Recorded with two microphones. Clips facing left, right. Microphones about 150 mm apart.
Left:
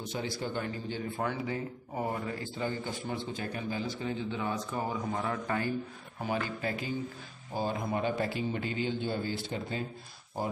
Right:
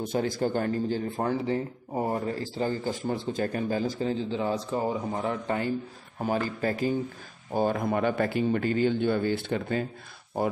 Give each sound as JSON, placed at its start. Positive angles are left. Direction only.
{"t": 0.0, "sound": "a man's voice", "side_deg": -50}
{"t": 6.2, "sound": "a man's voice", "side_deg": -40}
{"t": 7.5, "sound": "a man's voice", "side_deg": -60}